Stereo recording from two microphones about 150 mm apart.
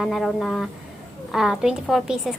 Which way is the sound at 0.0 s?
Centre (ahead or behind).